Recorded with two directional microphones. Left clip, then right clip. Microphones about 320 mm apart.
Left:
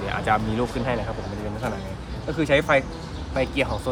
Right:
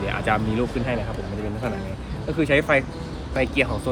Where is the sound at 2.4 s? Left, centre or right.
Centre.